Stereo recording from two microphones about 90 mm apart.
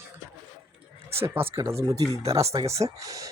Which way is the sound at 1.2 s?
25° right (ahead or behind).